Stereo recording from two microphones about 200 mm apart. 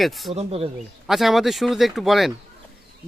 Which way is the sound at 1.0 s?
Centre (ahead or behind).